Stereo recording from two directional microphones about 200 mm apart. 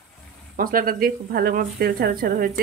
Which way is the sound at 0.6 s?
45° right (ahead or behind).